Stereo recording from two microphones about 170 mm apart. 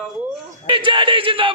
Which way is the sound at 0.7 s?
30° right (ahead or behind).